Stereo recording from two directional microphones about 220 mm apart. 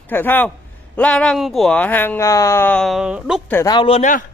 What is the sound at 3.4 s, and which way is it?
Speech, 15° left (ahead or behind).